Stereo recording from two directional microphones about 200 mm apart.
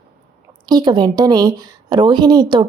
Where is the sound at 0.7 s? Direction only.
20° right (ahead or behind).